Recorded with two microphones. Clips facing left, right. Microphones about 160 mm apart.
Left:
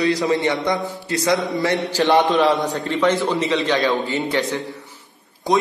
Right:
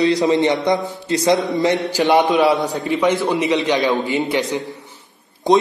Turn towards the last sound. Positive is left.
turn(degrees=-20)  # may be behind; listen again after turning